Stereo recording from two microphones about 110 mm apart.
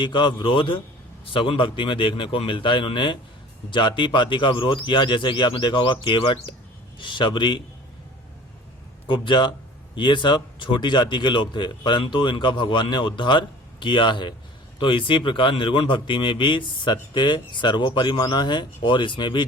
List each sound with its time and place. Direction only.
0.0 s speech: 45° left (ahead or behind)
9.0 s speech: 50° left (ahead or behind)